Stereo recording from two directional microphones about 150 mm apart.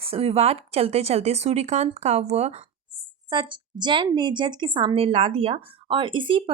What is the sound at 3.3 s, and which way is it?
Speech, 30° right (ahead or behind).